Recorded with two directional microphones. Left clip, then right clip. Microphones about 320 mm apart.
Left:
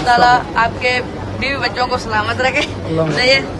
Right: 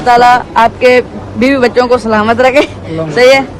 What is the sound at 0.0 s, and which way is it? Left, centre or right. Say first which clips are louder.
Speech: right 5 dB; right.